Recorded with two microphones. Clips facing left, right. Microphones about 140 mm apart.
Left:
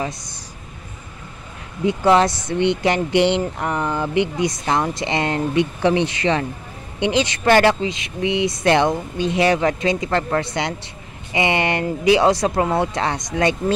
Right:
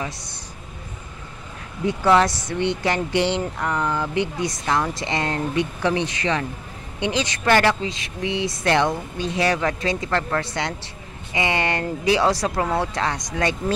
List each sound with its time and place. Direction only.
1.9 s speech: 20° left (ahead or behind)